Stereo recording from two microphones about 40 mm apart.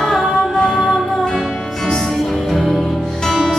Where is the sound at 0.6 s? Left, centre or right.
Centre.